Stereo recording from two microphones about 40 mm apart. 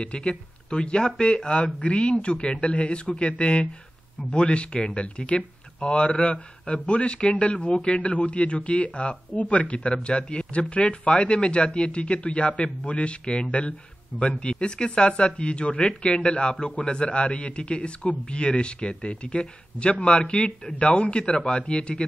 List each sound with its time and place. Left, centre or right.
0.3 s speech: left